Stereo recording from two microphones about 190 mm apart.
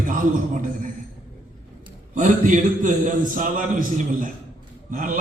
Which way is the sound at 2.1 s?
45° right (ahead or behind).